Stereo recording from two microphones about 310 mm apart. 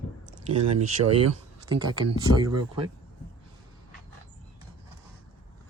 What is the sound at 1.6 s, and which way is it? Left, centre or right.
Speech, centre.